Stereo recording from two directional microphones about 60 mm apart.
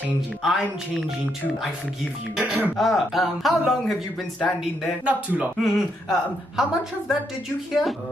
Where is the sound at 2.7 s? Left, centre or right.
Centre.